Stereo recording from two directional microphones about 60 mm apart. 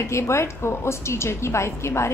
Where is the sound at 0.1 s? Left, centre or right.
Left.